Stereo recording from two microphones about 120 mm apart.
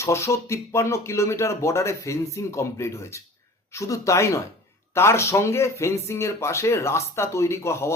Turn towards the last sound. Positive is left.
turn(degrees=25)  # may be behind; listen again after turning